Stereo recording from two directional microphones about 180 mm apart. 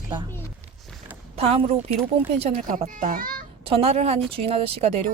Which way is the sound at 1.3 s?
35° right (ahead or behind).